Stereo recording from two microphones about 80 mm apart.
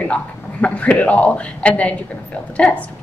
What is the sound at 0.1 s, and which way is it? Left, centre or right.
A woman's voice, centre.